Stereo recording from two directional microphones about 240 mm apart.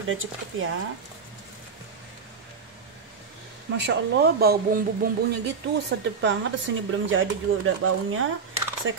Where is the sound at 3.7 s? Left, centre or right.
Right.